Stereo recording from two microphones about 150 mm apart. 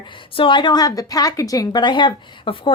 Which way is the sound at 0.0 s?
35° left (ahead or behind).